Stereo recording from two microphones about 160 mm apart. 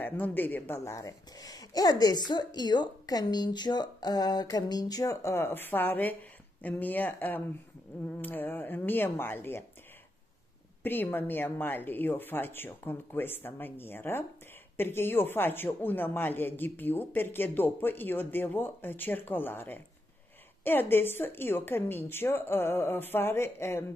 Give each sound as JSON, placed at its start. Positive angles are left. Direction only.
{"t": 0.0, "sound": "speech", "side_deg": 10}
{"t": 10.8, "sound": "speech", "side_deg": 10}